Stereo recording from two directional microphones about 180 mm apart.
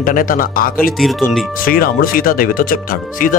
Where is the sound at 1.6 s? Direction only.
55° left (ahead or behind).